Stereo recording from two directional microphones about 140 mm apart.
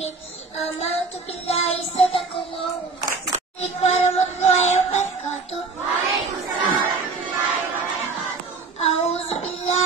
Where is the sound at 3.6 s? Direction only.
50° left (ahead or behind).